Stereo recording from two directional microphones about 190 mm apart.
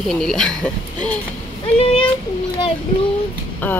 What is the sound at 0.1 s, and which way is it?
Speech, 5° left (ahead or behind).